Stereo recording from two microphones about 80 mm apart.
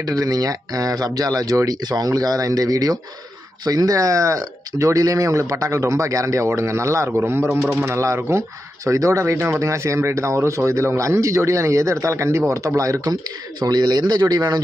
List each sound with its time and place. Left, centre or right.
0.0 s speech: right